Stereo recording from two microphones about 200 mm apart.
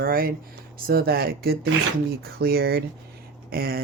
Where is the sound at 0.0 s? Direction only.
50° right (ahead or behind).